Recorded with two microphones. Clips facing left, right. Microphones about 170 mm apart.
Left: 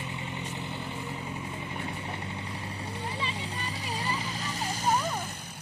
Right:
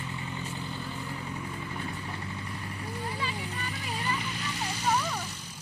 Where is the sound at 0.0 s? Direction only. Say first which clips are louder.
Even; 20° left (ahead or behind).